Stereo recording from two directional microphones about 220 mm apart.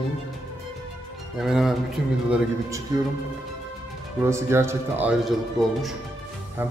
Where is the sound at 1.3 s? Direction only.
Centre (ahead or behind).